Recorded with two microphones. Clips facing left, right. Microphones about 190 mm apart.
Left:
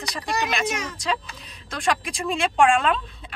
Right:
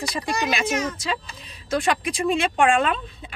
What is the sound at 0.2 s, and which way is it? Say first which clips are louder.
Speech: even; 5° right (ahead or behind).